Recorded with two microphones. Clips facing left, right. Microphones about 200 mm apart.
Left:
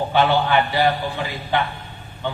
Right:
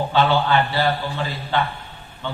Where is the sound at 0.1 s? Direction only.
15° left (ahead or behind).